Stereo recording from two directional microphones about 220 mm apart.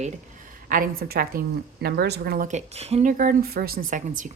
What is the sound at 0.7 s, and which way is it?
A woman's voice, 40° right (ahead or behind).